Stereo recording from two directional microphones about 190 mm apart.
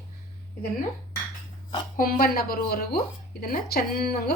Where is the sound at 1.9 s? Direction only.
50° left (ahead or behind).